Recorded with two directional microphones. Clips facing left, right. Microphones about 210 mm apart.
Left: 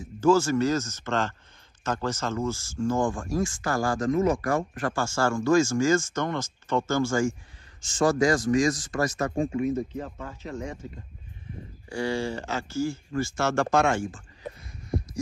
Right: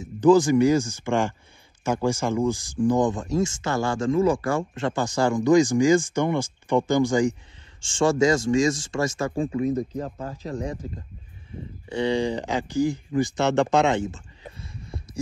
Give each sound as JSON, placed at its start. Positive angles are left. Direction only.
{"t": 0.0, "sound": "speech", "side_deg": -15}
{"t": 7.8, "sound": "speech", "side_deg": -30}
{"t": 9.6, "sound": "speech", "side_deg": -35}
{"t": 11.9, "sound": "speech", "side_deg": -20}